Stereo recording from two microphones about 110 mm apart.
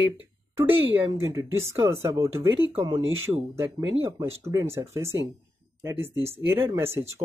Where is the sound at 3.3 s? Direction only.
25° right (ahead or behind).